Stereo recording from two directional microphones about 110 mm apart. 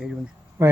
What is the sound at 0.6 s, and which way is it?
Speech, 25° right (ahead or behind).